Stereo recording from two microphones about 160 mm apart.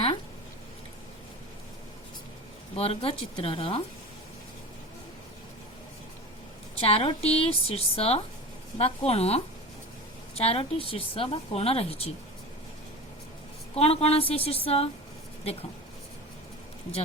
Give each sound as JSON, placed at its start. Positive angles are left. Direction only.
{"t": 2.7, "sound": "a woman's voice", "side_deg": 40}
{"t": 6.7, "sound": "a woman's voice", "side_deg": 35}
{"t": 13.7, "sound": "a woman's voice", "side_deg": 40}